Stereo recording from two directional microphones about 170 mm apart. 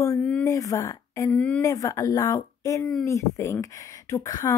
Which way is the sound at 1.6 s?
20° left (ahead or behind).